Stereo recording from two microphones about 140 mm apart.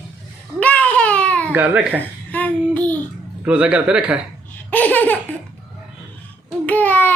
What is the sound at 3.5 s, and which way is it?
Speech, 10° right (ahead or behind).